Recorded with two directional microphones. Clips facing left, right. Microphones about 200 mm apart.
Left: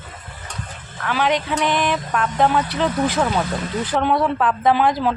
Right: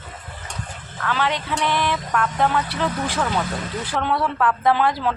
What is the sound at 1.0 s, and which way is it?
Speech, 15° left (ahead or behind).